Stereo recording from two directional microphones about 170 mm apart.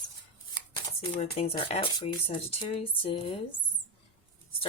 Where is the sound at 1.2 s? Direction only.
40° left (ahead or behind).